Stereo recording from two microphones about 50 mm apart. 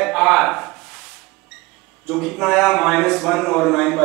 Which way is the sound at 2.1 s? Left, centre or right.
Centre.